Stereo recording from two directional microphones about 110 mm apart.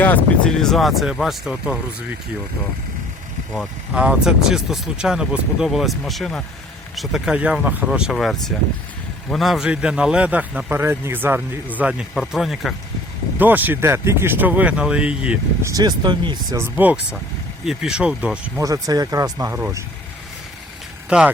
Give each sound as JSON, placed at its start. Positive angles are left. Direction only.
{"t": 0.0, "sound": "speech", "side_deg": 15}
{"t": 0.6, "sound": "speech", "side_deg": 0}
{"t": 3.9, "sound": "a man's voice", "side_deg": -10}
{"t": 12.1, "sound": "speech", "side_deg": 0}
{"t": 13.4, "sound": "a man's voice", "side_deg": -15}
{"t": 15.6, "sound": "speech", "side_deg": -35}
{"t": 16.6, "sound": "a man's voice", "side_deg": -15}
{"t": 18.5, "sound": "speech", "side_deg": -35}
{"t": 21.1, "sound": "a man's voice", "side_deg": -10}